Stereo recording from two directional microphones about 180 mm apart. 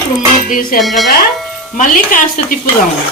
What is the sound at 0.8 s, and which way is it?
Speech, centre (ahead or behind).